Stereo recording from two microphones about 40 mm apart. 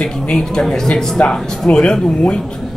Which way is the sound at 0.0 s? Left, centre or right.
Centre.